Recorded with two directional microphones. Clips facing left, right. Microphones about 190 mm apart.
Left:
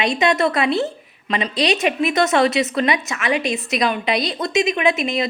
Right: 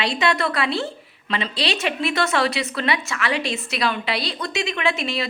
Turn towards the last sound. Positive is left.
turn(degrees=20)  # may be behind; listen again after turning